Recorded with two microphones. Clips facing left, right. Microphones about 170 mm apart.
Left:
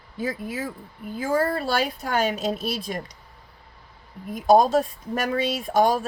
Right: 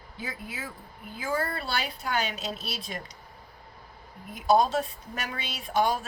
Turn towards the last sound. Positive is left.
turn(degrees=45)  # may be behind; listen again after turning